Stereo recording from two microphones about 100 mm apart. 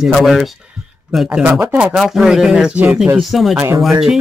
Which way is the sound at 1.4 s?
15° right (ahead or behind).